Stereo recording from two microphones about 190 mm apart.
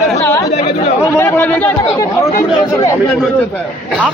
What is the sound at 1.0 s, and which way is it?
Speech, 10° left (ahead or behind).